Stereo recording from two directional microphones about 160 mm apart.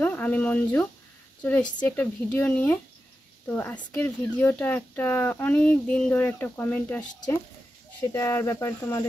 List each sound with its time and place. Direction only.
0.0 s speech: 10° left (ahead or behind)
8.1 s speech: 20° left (ahead or behind)